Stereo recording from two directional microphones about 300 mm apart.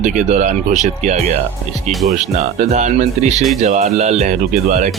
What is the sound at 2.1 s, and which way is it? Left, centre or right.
Speech, right.